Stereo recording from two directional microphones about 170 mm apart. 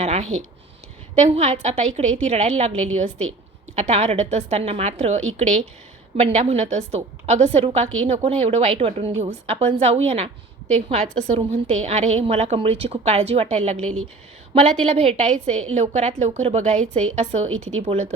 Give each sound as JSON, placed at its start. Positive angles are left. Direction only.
{"t": 0.0, "sound": "a woman's voice", "side_deg": -40}